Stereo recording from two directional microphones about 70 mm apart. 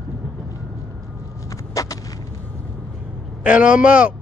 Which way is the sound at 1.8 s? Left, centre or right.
Left.